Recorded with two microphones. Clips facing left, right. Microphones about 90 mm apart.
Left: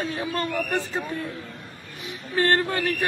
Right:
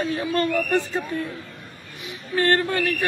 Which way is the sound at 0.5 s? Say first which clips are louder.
Right 4 dB; 5° left (ahead or behind).